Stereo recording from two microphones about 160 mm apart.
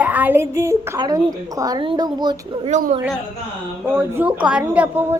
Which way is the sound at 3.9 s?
15° right (ahead or behind).